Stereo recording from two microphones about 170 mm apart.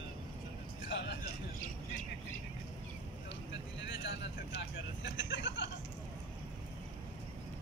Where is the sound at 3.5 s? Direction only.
90° left.